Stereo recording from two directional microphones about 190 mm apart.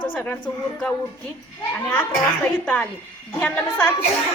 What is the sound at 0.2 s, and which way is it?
Speech, 10° left (ahead or behind).